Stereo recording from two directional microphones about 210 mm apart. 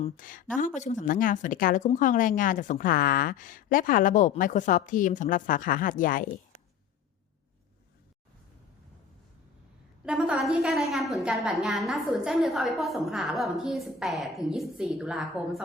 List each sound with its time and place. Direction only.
0.2 s a woman's voice: 40° left (ahead or behind)
10.1 s a woman's voice: centre (ahead or behind)